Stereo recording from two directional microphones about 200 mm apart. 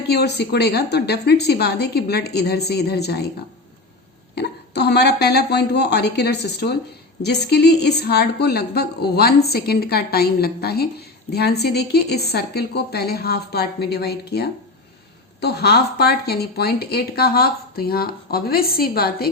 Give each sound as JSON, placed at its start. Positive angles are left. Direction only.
{"t": 0.1, "sound": "speech", "side_deg": 55}
{"t": 4.4, "sound": "speech", "side_deg": 55}